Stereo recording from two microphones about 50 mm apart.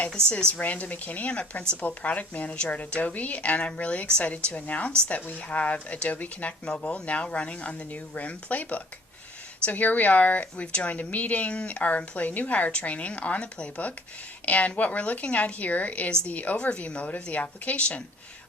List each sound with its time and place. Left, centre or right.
0.3 s speech: left
0.6 s speech: left